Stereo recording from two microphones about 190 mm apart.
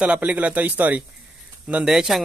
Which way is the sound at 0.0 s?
5° right (ahead or behind).